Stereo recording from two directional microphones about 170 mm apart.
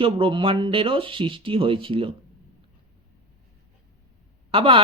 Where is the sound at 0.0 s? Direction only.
30° right (ahead or behind).